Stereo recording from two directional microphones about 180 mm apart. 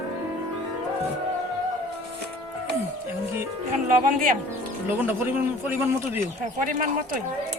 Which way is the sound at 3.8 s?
50° right (ahead or behind).